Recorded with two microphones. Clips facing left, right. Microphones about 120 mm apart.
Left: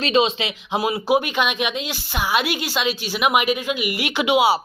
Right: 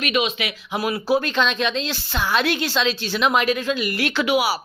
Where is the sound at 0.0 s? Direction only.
30° left (ahead or behind).